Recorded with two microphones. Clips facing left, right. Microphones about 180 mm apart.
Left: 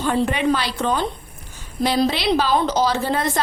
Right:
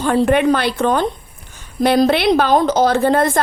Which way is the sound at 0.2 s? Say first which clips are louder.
Right 9 dB; 55° right (ahead or behind).